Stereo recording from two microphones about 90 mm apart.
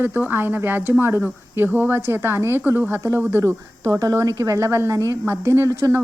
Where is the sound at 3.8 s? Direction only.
40° right (ahead or behind).